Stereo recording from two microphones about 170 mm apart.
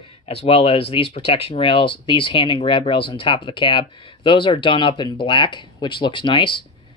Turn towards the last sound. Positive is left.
turn(degrees=30)  # may be behind; listen again after turning